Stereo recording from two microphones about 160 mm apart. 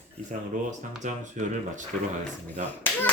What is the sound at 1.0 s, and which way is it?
Speech, 45° right (ahead or behind).